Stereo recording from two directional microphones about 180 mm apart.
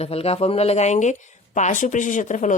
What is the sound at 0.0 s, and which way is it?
Speech, 35° left (ahead or behind).